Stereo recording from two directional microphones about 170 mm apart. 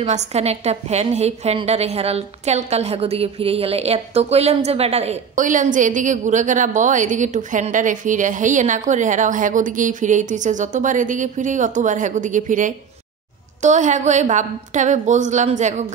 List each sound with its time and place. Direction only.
0.0 s a woman's voice: 40° right (ahead or behind)